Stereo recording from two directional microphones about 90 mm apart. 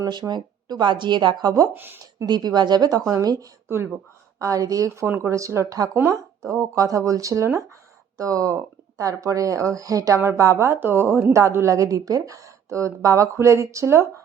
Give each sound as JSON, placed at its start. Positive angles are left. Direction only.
{"t": 0.0, "sound": "speech", "side_deg": -50}
{"t": 1.7, "sound": "speech", "side_deg": -20}
{"t": 2.2, "sound": "a woman's voice", "side_deg": -50}
{"t": 5.0, "sound": "a woman's voice", "side_deg": -25}